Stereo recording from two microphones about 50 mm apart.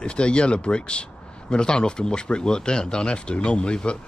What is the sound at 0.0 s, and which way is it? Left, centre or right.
Speech, left.